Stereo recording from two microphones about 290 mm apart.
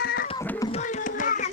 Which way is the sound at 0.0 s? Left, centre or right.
Left.